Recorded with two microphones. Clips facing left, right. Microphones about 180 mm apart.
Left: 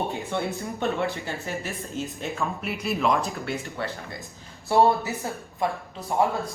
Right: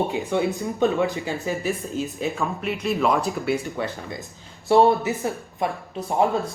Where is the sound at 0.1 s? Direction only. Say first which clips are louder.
Right 5 dB; 15° right (ahead or behind).